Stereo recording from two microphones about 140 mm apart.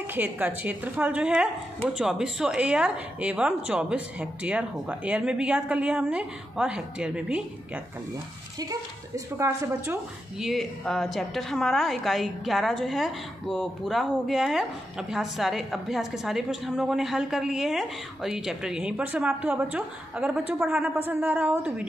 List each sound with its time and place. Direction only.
0.1 s a woman's voice: 10° right (ahead or behind)
8.5 s speech: 25° right (ahead or behind)
10.4 s a woman's voice: centre (ahead or behind)